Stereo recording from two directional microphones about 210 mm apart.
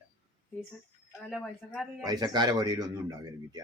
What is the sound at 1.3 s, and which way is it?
Speech, 5° left (ahead or behind).